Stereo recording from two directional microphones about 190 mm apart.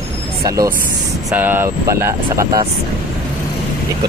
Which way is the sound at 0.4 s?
20° right (ahead or behind).